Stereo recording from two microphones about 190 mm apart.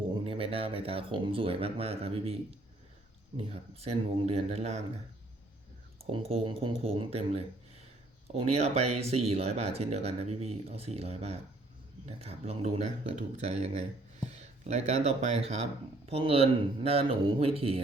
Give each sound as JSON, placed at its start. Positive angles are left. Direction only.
{"t": 0.1, "sound": "speech", "side_deg": -30}
{"t": 6.1, "sound": "speech", "side_deg": -30}